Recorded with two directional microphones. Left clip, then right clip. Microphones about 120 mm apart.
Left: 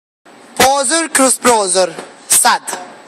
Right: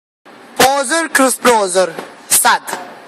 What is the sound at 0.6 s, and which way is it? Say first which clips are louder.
Music: left 2 dB; 25° left (ahead or behind).